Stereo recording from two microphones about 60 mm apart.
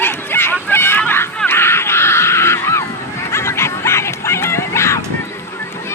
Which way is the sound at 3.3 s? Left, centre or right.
Left.